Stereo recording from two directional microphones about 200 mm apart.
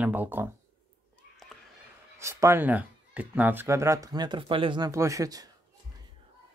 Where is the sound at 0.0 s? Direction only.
10° right (ahead or behind).